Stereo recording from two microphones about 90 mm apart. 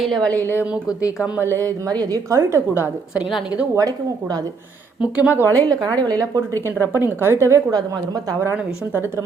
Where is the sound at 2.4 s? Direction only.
30° right (ahead or behind).